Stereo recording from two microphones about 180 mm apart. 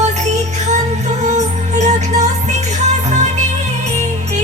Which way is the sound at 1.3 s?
40° right (ahead or behind).